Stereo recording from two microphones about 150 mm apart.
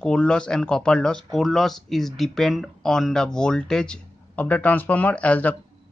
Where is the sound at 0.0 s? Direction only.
5° left (ahead or behind).